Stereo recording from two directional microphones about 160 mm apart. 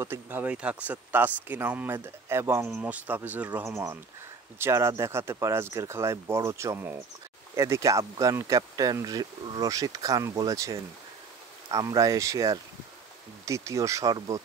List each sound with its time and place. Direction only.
0.0 s speech: 15° right (ahead or behind)